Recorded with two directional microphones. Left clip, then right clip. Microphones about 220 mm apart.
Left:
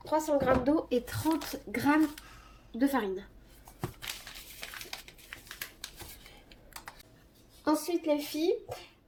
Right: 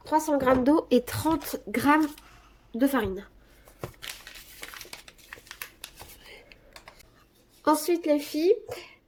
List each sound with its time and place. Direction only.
0.0 s a woman's voice: 50° right (ahead or behind); by 3.2 s 30° right (ahead or behind)
7.6 s speech: 40° right (ahead or behind)